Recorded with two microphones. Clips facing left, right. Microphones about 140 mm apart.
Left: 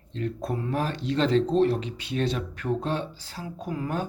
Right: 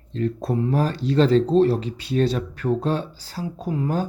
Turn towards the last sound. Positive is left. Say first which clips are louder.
# right 5 dB
turn(degrees=-30)  # may be behind; listen again after turning